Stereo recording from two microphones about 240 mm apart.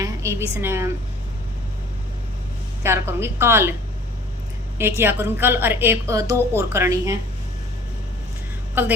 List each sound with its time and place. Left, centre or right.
0.0 s a woman's voice: centre
2.8 s a woman's voice: centre
4.8 s a woman's voice: centre
8.7 s a woman's voice: centre